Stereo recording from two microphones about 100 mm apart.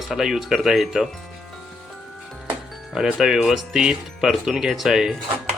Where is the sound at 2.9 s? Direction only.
5° right (ahead or behind).